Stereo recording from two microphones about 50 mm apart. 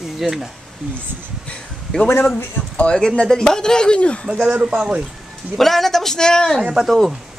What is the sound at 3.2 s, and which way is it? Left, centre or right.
Speech, centre.